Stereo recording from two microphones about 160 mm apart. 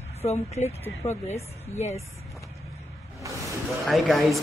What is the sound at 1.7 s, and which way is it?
Speech, 45° left (ahead or behind).